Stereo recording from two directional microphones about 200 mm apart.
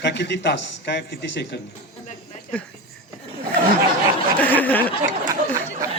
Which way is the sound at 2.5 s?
5° left (ahead or behind).